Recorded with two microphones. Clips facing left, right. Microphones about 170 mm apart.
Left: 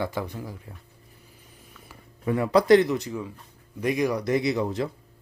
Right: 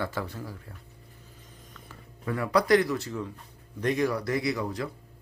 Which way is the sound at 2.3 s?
20° left (ahead or behind).